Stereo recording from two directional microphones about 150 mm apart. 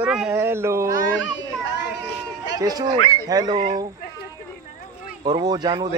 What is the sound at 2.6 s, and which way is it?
Speech, 25° right (ahead or behind).